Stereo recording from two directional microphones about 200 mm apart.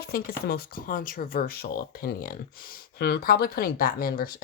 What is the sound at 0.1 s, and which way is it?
Speech, 50° left (ahead or behind).